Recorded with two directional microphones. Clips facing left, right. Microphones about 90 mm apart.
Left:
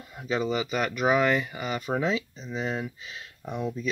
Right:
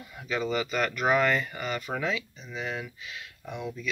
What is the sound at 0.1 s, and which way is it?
Speech, 25° left (ahead or behind).